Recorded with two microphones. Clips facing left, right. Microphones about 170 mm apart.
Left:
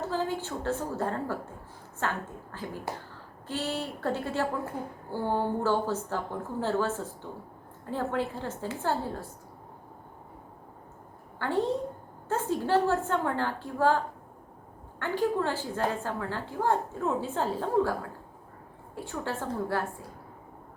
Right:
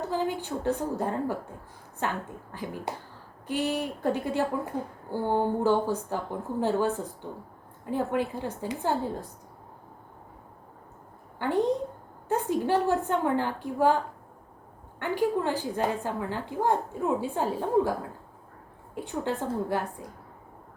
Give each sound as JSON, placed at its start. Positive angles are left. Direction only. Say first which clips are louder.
{"t": 0.1, "sound": "a woman's voice", "louder": "right 3 dB", "side_deg": -15}
{"t": 11.3, "sound": "a woman's voice", "louder": "right 2 dB", "side_deg": -15}
{"t": 18.9, "sound": "a woman's voice", "louder": "right 4 dB", "side_deg": -20}